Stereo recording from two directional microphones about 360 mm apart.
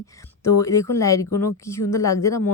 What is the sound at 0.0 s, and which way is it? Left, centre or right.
A woman's voice, centre.